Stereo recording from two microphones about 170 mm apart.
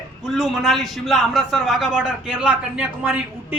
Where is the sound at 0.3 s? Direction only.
Centre (ahead or behind).